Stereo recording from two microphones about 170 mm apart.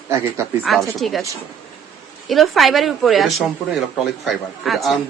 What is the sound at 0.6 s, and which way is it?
Speech, centre (ahead or behind).